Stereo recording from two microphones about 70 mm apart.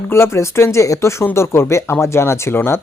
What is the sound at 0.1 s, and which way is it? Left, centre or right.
Speech, left.